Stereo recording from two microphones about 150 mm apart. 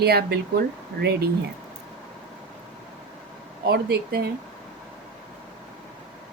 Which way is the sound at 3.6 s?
90° right.